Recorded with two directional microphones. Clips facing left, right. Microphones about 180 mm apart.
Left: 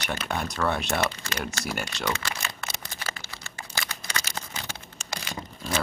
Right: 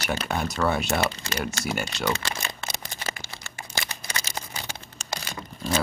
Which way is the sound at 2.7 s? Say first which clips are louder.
Right 2 dB; 15° right (ahead or behind).